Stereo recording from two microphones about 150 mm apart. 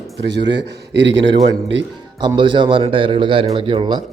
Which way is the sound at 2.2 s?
30° right (ahead or behind).